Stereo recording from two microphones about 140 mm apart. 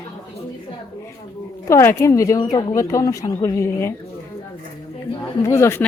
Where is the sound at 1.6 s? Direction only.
20° left (ahead or behind).